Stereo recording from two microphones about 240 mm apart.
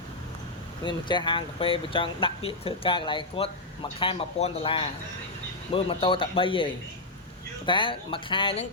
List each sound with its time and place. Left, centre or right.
0.9 s speech: centre